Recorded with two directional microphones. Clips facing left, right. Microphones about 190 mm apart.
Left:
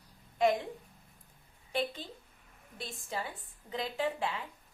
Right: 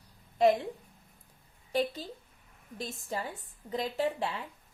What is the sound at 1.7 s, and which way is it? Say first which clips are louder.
A woman's voice: right 4 dB; 40° right (ahead or behind).